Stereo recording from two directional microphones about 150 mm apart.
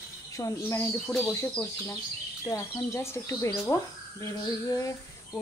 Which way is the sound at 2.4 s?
20° left (ahead or behind).